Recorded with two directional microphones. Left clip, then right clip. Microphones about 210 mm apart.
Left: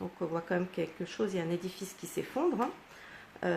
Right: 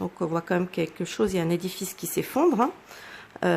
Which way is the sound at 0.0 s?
30° right (ahead or behind).